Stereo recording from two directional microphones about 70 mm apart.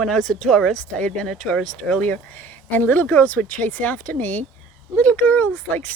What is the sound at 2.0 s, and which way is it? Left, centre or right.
Speech, left.